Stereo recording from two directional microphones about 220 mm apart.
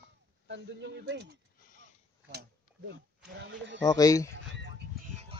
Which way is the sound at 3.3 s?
50° right (ahead or behind).